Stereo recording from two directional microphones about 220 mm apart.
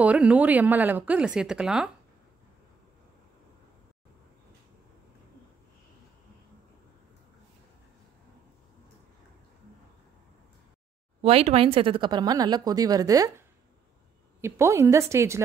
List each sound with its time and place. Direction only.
0.0 s a woman's voice: 5° right (ahead or behind)
11.1 s speech: 25° right (ahead or behind)
14.4 s a woman's voice: 10° right (ahead or behind)